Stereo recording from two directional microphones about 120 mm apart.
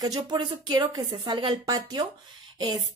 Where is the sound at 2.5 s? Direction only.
40° right (ahead or behind).